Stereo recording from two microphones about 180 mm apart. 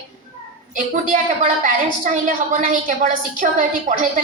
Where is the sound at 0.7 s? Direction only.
50° right (ahead or behind).